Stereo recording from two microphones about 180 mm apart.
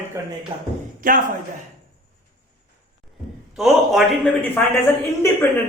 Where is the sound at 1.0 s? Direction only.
50° right (ahead or behind).